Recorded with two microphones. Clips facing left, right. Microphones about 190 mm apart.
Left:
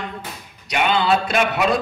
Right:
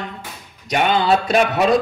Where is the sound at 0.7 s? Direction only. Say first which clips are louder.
Right 2 dB; 40° right (ahead or behind).